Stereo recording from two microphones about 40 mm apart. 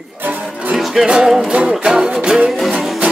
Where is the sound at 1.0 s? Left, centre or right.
Right.